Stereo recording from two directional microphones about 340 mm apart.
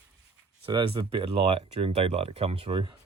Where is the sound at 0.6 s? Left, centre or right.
Centre.